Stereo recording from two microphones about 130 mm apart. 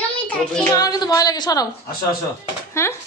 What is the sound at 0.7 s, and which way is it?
Speech, 30° left (ahead or behind).